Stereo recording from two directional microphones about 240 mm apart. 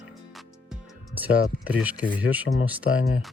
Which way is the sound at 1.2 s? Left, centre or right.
Centre.